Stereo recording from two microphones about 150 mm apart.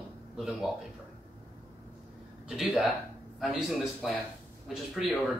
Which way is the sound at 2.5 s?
Centre (ahead or behind).